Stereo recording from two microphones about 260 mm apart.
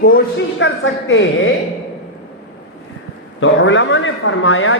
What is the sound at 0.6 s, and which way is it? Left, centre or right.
Speech, left.